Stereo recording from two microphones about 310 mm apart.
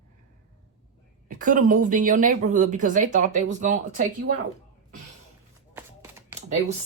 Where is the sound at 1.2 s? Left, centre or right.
Right.